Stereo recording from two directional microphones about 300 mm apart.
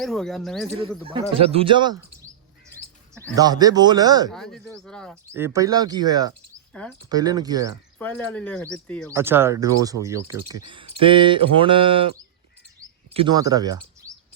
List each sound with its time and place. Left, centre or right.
0.0 s speech: centre
1.0 s speech: centre
3.3 s speech: centre
4.3 s speech: centre
5.3 s speech: centre
6.7 s speech: centre
7.1 s speech: centre
7.9 s speech: centre
9.1 s speech: centre